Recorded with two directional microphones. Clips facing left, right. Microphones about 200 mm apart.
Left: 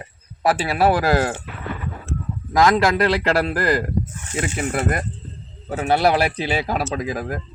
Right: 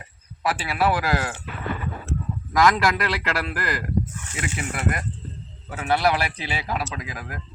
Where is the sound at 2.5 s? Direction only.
25° left (ahead or behind).